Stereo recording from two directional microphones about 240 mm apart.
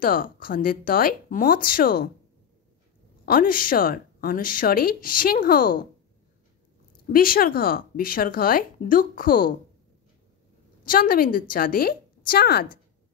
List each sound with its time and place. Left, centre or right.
0.0 s a woman's voice: left
3.3 s a woman's voice: left
7.1 s a woman's voice: left
10.9 s a woman's voice: left